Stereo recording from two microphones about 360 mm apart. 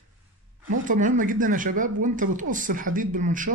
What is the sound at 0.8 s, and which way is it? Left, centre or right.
A man's voice, right.